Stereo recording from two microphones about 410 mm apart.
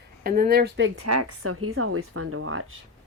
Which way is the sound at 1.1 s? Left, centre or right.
Right.